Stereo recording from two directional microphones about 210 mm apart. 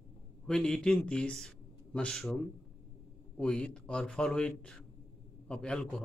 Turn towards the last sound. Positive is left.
turn(degrees=5)  # may be behind; listen again after turning